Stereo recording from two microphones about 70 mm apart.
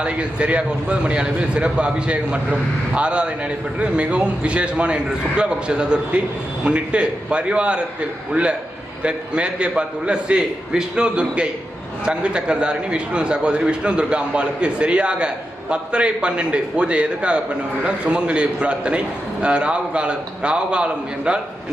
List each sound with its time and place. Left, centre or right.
0.0 s a man's voice: centre